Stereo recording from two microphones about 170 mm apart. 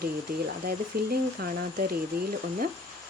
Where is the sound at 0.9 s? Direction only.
60° right (ahead or behind).